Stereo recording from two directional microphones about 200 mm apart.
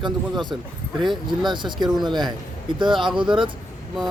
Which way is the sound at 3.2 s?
25° right (ahead or behind).